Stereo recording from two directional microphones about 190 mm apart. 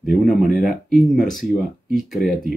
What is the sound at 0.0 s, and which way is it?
Speech, centre (ahead or behind).